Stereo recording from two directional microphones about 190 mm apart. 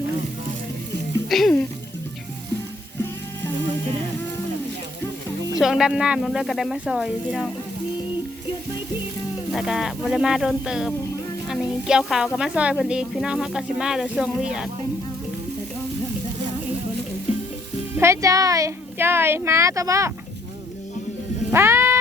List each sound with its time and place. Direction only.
1.3 s speech: 5° left (ahead or behind)
5.5 s speech: centre (ahead or behind)
9.5 s speech: centre (ahead or behind)
18.0 s a woman's voice: 15° right (ahead or behind)
21.5 s music: 15° right (ahead or behind)